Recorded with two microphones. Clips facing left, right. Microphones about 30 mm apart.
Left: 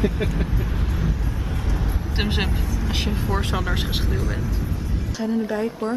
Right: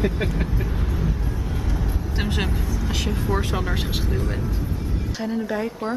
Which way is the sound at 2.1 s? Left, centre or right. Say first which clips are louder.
Left 3 dB; left.